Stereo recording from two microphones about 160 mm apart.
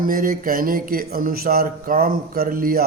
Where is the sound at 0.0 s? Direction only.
60° right (ahead or behind).